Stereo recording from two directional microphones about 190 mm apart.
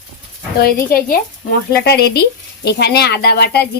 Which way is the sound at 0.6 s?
50° left (ahead or behind).